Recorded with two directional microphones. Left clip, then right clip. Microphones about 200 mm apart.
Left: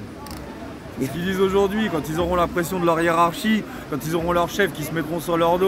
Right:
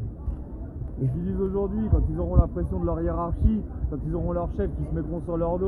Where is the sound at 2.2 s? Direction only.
40° left (ahead or behind).